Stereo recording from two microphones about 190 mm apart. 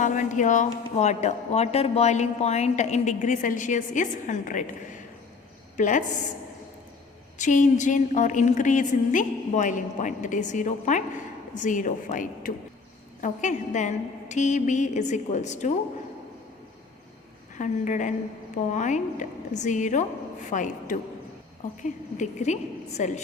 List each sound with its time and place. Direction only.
0.0 s a woman's voice: 40° left (ahead or behind)
5.7 s a woman's voice: 40° left (ahead or behind)
7.3 s a woman's voice: 40° left (ahead or behind)
17.6 s a woman's voice: 40° left (ahead or behind)
22.2 s a woman's voice: 40° left (ahead or behind)